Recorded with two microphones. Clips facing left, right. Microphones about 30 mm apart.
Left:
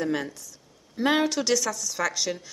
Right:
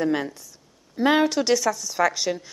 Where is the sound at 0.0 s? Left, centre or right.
Centre.